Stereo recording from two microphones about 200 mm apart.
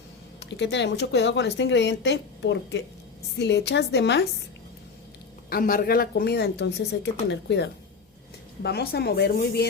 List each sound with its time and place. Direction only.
0.3 s speech: 60° left (ahead or behind)
5.5 s a woman's voice: 45° left (ahead or behind)